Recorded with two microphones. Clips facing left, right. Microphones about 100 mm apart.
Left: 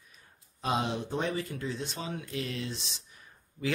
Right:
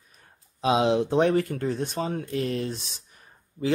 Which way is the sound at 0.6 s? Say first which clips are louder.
Right 9 dB; 90° right.